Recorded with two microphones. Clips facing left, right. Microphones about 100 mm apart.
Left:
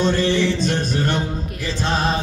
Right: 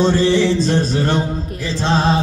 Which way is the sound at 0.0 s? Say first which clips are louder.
Right 4 dB; 30° right (ahead or behind).